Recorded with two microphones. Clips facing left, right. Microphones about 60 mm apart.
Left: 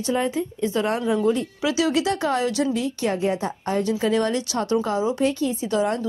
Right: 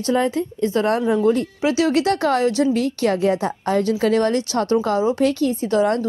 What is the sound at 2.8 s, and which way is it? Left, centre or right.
A woman's voice, right.